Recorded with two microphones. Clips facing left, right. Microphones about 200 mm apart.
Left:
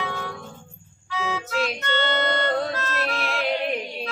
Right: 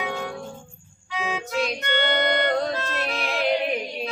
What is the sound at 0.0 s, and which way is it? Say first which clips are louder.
Music: right 2 dB; 15° right (ahead or behind).